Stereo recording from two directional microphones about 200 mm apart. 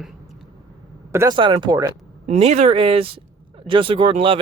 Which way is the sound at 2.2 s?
35° right (ahead or behind).